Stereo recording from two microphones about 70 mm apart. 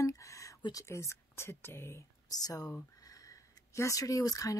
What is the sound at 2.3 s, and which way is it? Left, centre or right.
Speech, left.